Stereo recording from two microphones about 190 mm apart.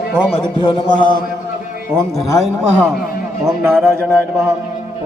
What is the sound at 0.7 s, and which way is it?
Speech, 25° left (ahead or behind).